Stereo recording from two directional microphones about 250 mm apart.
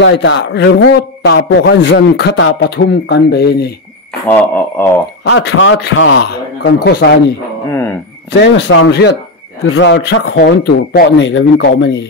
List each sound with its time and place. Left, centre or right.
0.0 s a man's voice: left
4.3 s speech: centre
5.2 s a man's voice: left
7.6 s speech: centre
8.3 s a man's voice: left